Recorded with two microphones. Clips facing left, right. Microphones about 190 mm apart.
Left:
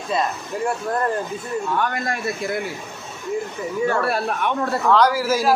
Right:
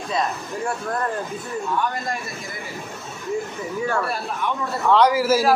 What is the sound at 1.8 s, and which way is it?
Speech, 65° left (ahead or behind).